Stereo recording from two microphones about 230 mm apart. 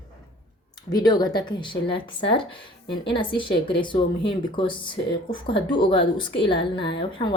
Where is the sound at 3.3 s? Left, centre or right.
Left.